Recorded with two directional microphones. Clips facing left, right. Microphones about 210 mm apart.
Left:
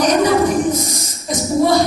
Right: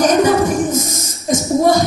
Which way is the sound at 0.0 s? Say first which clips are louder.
Right 1 dB; 45° right (ahead or behind).